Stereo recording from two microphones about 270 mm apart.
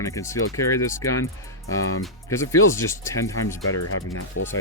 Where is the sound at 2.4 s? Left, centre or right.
Left.